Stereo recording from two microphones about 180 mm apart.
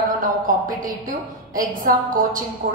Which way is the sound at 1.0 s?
50° right (ahead or behind).